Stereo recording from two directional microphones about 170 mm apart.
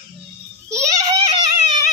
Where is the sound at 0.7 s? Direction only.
20° right (ahead or behind).